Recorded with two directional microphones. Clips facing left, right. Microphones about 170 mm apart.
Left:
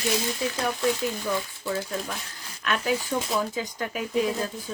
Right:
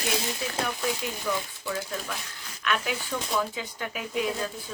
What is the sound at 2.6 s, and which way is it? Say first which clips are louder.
Speech: left 3 dB; 35° left (ahead or behind).